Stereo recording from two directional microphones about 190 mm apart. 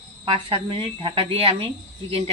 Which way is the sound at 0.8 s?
30° right (ahead or behind).